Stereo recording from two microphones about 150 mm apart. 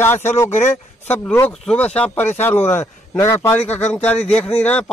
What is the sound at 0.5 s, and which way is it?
Speech, 50° left (ahead or behind).